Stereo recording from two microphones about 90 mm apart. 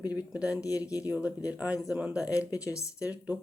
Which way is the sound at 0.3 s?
10° right (ahead or behind).